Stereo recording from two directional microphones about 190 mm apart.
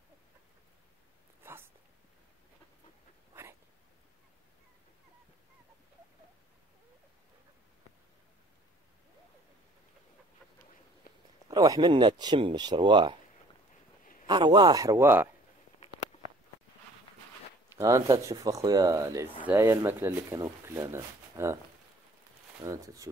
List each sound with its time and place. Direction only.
1.4 s a sound: 10° right (ahead or behind)
11.1 s a sound: 55° left (ahead or behind)
11.5 s speech: 20° right (ahead or behind)
14.2 s speech: 25° right (ahead or behind)
17.7 s speech: 15° right (ahead or behind)
22.6 s speech: 20° right (ahead or behind)